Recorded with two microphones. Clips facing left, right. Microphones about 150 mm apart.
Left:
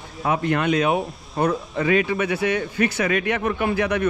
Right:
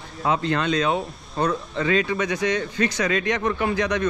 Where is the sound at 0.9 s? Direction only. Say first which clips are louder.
Left 2 dB; 20° left (ahead or behind).